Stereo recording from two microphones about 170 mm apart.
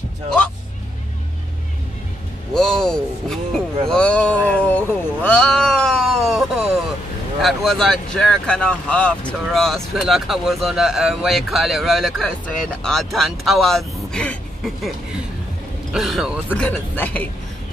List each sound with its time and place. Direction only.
2.5 s a sound: 5° left (ahead or behind)
7.4 s speech: centre (ahead or behind)
15.9 s speech: centre (ahead or behind)
16.6 s speech: 10° left (ahead or behind)